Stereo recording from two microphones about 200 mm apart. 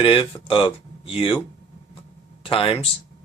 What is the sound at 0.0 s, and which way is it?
Speech, 25° left (ahead or behind).